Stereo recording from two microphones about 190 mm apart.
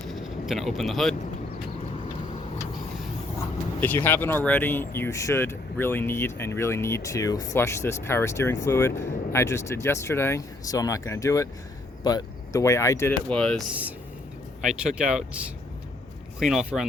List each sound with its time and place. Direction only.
0.1 s speech: centre (ahead or behind)
3.8 s speech: 10° left (ahead or behind)
14.6 s speech: 5° right (ahead or behind)